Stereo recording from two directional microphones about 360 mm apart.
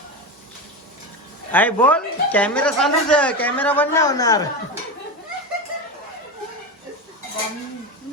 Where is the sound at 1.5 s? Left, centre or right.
Centre.